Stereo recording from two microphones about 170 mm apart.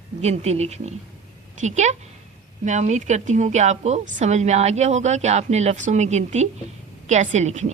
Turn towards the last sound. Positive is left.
turn(degrees=-45)  # may be behind; listen again after turning